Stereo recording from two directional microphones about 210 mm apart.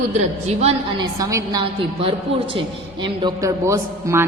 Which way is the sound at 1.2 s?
15° right (ahead or behind).